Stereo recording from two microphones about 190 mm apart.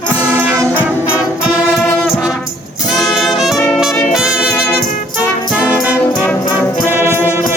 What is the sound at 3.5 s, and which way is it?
Brass instrument, 10° left (ahead or behind).